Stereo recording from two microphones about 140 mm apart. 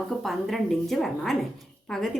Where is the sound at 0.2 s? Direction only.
Centre (ahead or behind).